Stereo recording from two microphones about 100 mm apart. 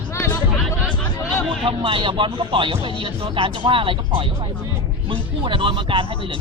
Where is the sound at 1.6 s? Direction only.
60° right (ahead or behind).